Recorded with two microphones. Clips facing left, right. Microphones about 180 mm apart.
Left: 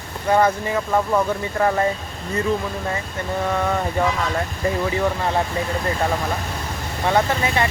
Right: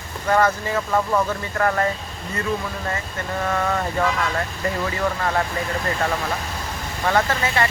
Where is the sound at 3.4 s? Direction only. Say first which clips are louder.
Left 1 dB; 10° left (ahead or behind).